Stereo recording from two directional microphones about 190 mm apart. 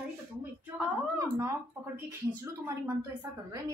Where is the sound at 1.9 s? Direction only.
10° right (ahead or behind).